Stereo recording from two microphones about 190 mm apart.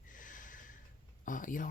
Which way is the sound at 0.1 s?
45° left (ahead or behind).